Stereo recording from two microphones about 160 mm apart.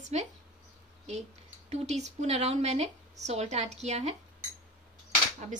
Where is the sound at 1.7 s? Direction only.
45° right (ahead or behind).